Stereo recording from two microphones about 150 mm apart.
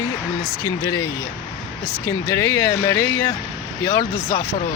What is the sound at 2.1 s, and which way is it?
Speech, 20° left (ahead or behind).